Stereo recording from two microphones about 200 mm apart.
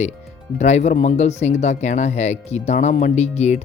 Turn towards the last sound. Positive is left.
turn(degrees=35)  # may be behind; listen again after turning